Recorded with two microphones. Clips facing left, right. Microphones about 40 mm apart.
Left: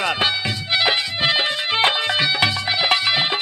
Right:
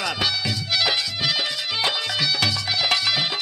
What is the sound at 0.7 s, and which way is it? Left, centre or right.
Music, left.